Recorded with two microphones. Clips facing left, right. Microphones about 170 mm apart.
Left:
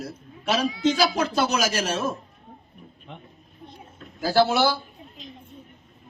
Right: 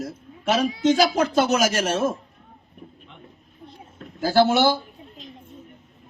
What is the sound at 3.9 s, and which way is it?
Speech, 45° right (ahead or behind).